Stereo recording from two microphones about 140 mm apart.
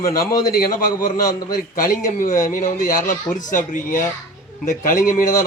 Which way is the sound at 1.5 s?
75° left (ahead or behind).